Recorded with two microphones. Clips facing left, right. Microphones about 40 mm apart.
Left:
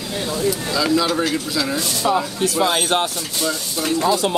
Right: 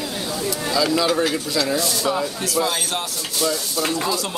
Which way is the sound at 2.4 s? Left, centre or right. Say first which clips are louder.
Left 6 dB; left.